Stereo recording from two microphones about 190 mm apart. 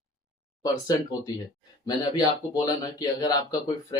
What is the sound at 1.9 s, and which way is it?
Speech, 20° left (ahead or behind).